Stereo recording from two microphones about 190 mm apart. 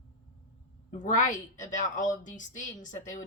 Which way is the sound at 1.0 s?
40° left (ahead or behind).